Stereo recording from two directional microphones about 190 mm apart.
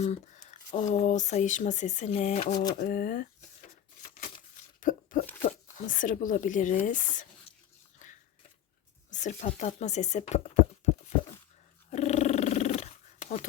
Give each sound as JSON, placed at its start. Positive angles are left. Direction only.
{"t": 0.0, "sound": "speech", "side_deg": 40}
{"t": 4.0, "sound": "a sound", "side_deg": 40}
{"t": 5.5, "sound": "speech", "side_deg": 45}
{"t": 9.0, "sound": "speech", "side_deg": 40}
{"t": 11.9, "sound": "dog", "side_deg": 35}